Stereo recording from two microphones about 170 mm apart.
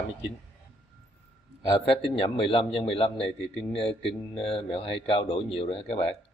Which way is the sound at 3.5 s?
Centre (ahead or behind).